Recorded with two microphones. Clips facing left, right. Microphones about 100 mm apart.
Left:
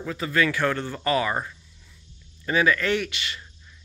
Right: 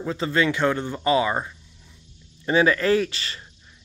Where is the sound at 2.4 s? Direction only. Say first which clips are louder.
Right 3 dB; 30° right (ahead or behind).